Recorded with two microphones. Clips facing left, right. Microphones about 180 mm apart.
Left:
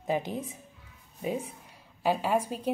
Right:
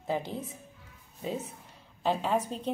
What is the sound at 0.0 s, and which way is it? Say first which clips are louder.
A woman's voice: left 2 dB; 15° left (ahead or behind).